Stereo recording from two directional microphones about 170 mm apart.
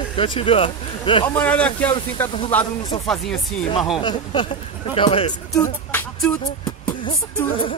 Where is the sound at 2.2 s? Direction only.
30° left (ahead or behind).